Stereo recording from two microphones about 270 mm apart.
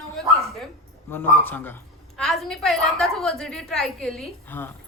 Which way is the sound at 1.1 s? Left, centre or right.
Centre.